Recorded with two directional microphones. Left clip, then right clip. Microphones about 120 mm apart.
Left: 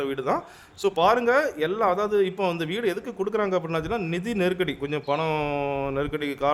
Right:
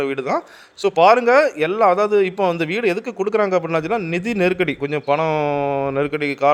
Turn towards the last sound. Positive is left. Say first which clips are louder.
# right 8 dB
turn(degrees=-30)  # may be behind; listen again after turning